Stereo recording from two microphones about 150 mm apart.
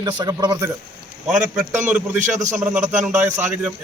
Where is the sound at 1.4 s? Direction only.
10° right (ahead or behind).